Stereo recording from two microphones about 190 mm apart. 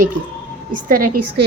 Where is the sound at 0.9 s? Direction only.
45° right (ahead or behind).